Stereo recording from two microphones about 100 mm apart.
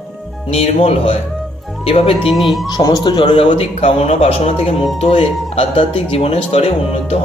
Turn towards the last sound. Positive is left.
turn(degrees=85)